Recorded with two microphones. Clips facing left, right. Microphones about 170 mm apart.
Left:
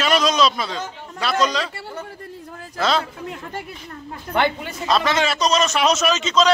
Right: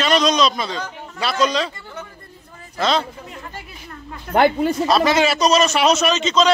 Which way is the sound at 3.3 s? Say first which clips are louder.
Left 4 dB; 65° left (ahead or behind).